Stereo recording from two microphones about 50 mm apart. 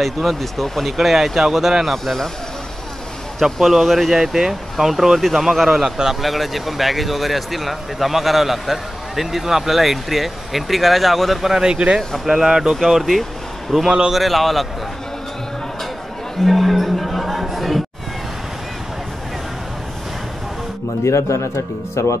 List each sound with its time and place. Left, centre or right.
0.0 s a man's voice: centre
3.3 s a man's voice: centre
4.1 s a man's voice: centre
11.6 s a man's voice: centre
16.4 s a sound: centre
21.0 s speech: left